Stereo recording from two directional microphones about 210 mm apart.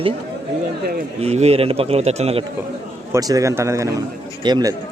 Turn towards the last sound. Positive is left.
turn(degrees=-20)  # may be behind; listen again after turning